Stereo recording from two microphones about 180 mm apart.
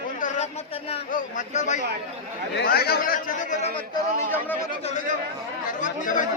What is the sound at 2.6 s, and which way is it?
Speech, 60° left (ahead or behind).